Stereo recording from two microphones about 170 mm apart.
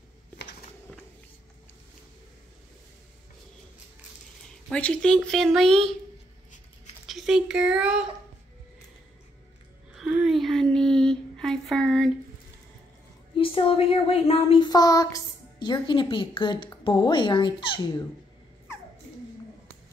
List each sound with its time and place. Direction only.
4.6 s speech: 5° left (ahead or behind)
7.1 s speech: centre (ahead or behind)
9.9 s a sound: 5° right (ahead or behind)
13.4 s speech: 30° left (ahead or behind)